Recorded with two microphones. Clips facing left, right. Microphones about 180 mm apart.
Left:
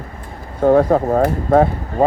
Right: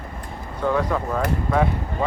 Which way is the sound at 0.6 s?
50° left (ahead or behind).